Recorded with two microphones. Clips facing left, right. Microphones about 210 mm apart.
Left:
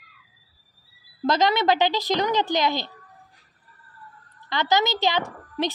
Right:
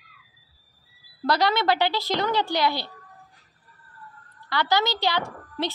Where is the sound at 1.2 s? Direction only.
20° left (ahead or behind).